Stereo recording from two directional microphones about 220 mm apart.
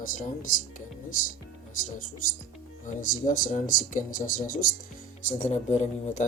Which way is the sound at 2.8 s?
35° left (ahead or behind).